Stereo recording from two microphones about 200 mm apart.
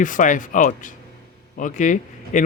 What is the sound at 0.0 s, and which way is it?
Speech, 40° left (ahead or behind).